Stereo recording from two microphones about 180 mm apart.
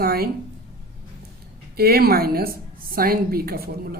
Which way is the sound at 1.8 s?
60° right (ahead or behind).